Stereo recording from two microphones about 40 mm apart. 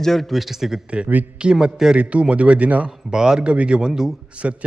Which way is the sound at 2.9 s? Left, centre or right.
Centre.